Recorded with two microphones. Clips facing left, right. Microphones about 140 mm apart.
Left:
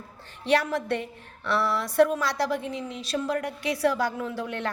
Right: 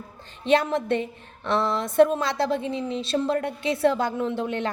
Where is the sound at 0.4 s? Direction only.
20° right (ahead or behind).